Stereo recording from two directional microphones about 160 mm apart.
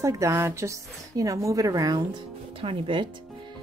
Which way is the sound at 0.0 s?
20° right (ahead or behind).